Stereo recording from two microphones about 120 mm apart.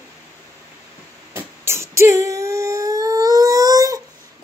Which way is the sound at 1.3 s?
20° right (ahead or behind).